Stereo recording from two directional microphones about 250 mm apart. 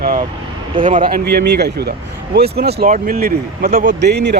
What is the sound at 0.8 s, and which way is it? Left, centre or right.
Speech, right.